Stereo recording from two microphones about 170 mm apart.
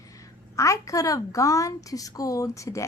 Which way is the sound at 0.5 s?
20° left (ahead or behind).